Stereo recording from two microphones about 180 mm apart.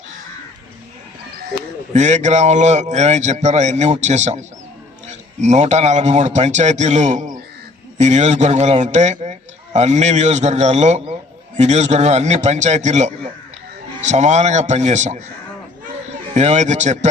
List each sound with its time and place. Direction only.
1.9 s a man's voice: 40° right (ahead or behind)
16.3 s a man's voice: 40° right (ahead or behind)